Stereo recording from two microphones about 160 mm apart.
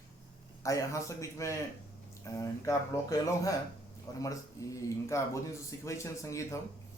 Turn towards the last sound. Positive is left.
turn(degrees=20)  # may be behind; listen again after turning